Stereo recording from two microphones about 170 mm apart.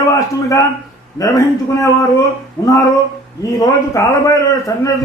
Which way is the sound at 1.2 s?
20° left (ahead or behind).